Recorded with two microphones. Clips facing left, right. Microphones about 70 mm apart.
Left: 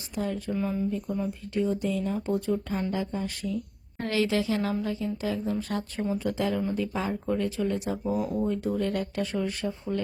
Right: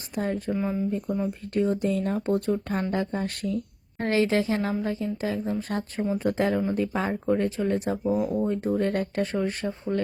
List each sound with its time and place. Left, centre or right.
0.2 s speech: right
0.5 s speech: centre
0.9 s speech: right
1.5 s speech: right
4.0 s speech: right